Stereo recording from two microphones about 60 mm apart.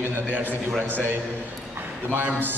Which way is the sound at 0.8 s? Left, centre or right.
Right.